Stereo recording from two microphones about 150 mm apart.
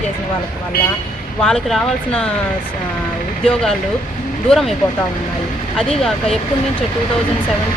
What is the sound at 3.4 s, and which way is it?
Speech, 5° left (ahead or behind).